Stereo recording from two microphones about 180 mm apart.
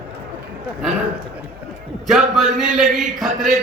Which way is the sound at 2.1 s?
Centre (ahead or behind).